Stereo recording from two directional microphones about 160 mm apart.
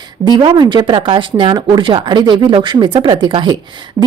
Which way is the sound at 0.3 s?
25° right (ahead or behind).